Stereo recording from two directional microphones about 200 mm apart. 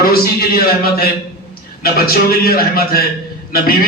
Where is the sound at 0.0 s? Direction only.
50° left (ahead or behind).